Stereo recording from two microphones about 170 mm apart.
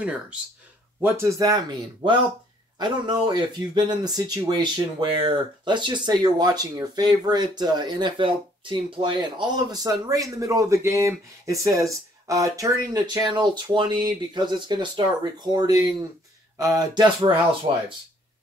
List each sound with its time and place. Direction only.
0.0 s speech: 10° right (ahead or behind); by 17.8 s 25° right (ahead or behind)